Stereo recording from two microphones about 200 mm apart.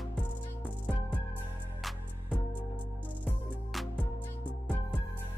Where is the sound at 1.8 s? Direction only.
Centre (ahead or behind).